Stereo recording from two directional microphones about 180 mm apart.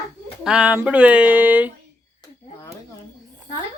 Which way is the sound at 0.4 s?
5° right (ahead or behind).